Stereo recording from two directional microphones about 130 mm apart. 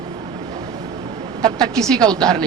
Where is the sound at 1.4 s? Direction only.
30° right (ahead or behind).